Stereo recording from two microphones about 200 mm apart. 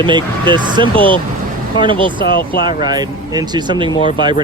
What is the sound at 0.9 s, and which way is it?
Speech, 10° left (ahead or behind).